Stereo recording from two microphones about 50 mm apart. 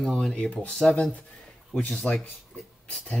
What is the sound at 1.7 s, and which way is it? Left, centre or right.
Speech, left.